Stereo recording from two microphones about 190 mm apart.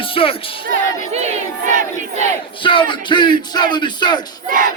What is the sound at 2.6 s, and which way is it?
Speech, 25° left (ahead or behind).